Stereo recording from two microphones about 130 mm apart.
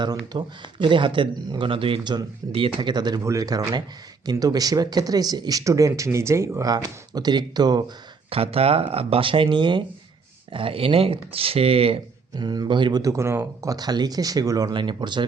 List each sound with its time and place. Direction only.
0.0 s speech: 35° right (ahead or behind)
8.3 s speech: 50° right (ahead or behind)
12.4 s speech: 35° right (ahead or behind)